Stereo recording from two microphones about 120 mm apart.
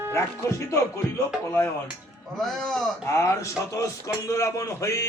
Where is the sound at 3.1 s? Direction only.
25° left (ahead or behind).